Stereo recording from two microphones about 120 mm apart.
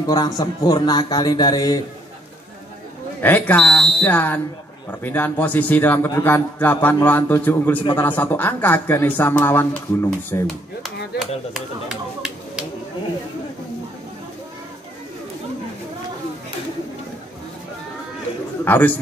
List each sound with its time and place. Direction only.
0.0 s speech: 35° left (ahead or behind)
3.2 s speech: 15° left (ahead or behind)
10.4 s speech: centre (ahead or behind)
18.6 s a man's voice: 15° left (ahead or behind)